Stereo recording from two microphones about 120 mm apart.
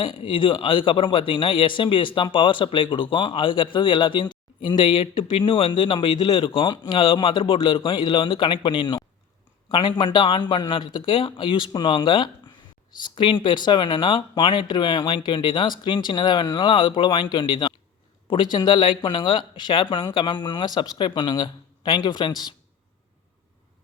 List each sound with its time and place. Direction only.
0.0 s speech: 45° left (ahead or behind)